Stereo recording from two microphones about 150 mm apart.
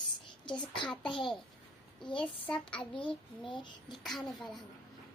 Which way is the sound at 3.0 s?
30° left (ahead or behind).